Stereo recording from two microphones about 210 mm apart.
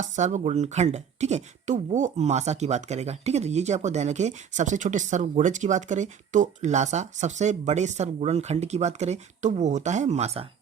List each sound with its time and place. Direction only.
0.0 s speech: 35° right (ahead or behind)